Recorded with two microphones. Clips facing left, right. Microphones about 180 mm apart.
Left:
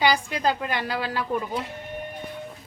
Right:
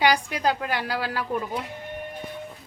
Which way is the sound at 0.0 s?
10° right (ahead or behind).